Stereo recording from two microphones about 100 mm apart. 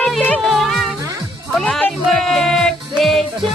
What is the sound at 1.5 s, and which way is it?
Speech, 5° left (ahead or behind).